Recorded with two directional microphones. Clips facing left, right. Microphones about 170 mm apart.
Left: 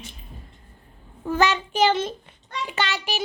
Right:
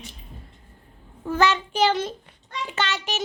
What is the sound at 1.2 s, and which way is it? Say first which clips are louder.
A child's voice: even; 15° left (ahead or behind).